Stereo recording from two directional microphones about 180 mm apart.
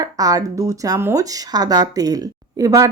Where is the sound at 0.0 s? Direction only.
20° right (ahead or behind).